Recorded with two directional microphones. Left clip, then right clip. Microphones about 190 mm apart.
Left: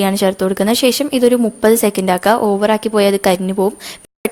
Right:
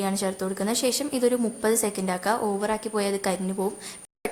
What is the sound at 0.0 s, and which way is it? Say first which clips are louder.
Speech: left 13 dB; 40° left (ahead or behind).